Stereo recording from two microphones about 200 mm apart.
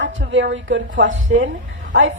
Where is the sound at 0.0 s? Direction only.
70° right (ahead or behind).